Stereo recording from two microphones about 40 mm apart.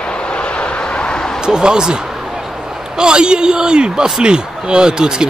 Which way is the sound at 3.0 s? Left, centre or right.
Right.